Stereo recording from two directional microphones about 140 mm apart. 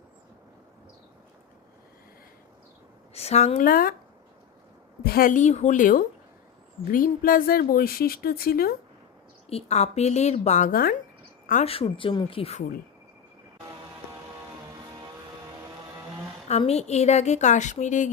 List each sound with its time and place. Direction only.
3.2 s a woman's voice: 50° left (ahead or behind)
3.6 s a woman's voice: 90° left
5.0 s a woman's voice: 90° left
9.5 s a woman's voice: 50° left (ahead or behind); by 10.9 s 90° left
11.6 s a woman's voice: 45° left (ahead or behind)
14.8 s music: 30° right (ahead or behind)
15.6 s vehicle: 15° right (ahead or behind)
16.5 s a woman's voice: 50° left (ahead or behind)